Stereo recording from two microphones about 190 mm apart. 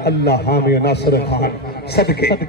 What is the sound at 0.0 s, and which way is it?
A man's voice, 60° left (ahead or behind).